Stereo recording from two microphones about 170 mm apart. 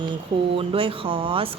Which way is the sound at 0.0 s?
30° right (ahead or behind).